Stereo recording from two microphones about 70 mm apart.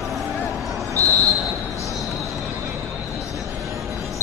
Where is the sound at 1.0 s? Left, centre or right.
Right.